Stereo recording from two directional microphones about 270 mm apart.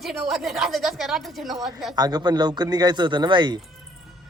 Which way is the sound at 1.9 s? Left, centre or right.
Centre.